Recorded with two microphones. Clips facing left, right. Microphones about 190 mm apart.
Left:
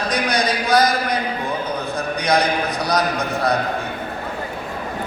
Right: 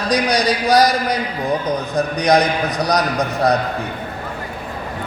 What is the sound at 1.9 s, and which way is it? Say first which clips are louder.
A man's voice: right 5 dB; 40° right (ahead or behind).